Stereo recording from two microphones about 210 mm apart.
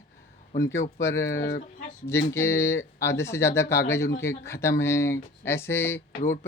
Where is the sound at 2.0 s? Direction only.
10° left (ahead or behind).